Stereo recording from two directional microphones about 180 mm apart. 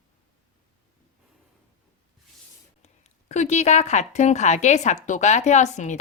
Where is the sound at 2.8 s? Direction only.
40° left (ahead or behind).